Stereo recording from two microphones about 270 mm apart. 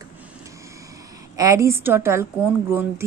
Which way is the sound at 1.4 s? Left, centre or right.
Centre.